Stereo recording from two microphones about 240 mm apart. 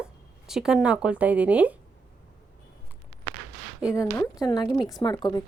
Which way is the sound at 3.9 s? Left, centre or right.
Centre.